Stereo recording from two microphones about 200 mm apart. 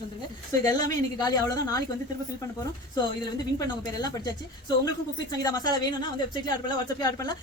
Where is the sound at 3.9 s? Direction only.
20° left (ahead or behind).